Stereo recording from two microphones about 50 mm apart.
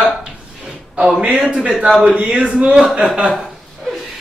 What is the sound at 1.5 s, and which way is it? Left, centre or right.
Speech, right.